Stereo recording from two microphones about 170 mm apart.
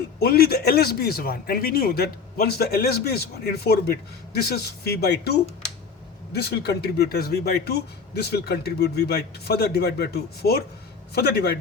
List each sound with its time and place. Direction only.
0.2 s a man's voice: 65° left (ahead or behind)